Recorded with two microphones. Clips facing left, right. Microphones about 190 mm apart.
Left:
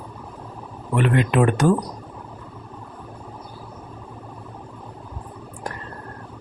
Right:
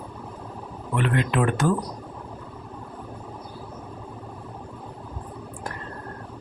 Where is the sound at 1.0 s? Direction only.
15° left (ahead or behind).